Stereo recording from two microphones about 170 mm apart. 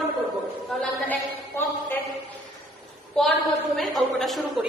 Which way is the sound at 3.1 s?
Centre (ahead or behind).